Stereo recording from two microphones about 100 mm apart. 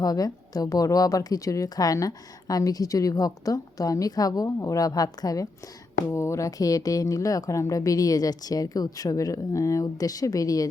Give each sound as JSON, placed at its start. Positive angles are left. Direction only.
{"t": 0.0, "sound": "a woman's voice", "side_deg": 40}
{"t": 6.1, "sound": "a woman's voice", "side_deg": 30}